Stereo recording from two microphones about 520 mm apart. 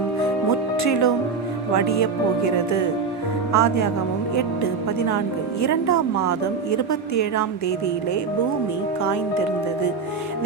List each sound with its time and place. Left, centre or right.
0.8 s a woman's voice: left